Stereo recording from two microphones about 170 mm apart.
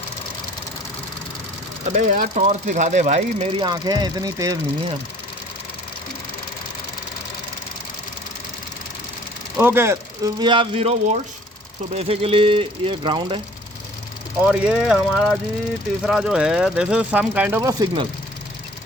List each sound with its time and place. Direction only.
1.8 s speech: 50° right (ahead or behind); by 4.5 s 20° right (ahead or behind)
9.6 s speech: 15° right (ahead or behind)
10.4 s speech: 30° right (ahead or behind)
14.4 s speech: 5° right (ahead or behind)
17.6 s speech: 20° right (ahead or behind)